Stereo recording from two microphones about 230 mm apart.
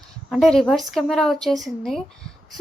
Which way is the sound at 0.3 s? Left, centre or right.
Centre.